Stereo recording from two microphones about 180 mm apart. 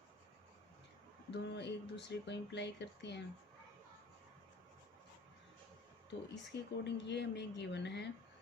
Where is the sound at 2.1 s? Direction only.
75° left (ahead or behind).